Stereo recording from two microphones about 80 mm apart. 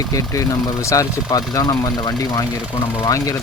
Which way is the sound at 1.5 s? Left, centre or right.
Left.